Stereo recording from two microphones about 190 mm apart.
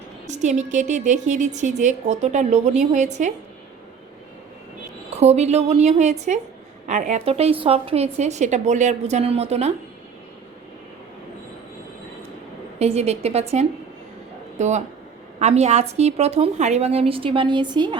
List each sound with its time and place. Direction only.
0.3 s a woman's voice: 40° right (ahead or behind)
5.1 s a woman's voice: 35° right (ahead or behind)
12.8 s a woman's voice: 35° right (ahead or behind)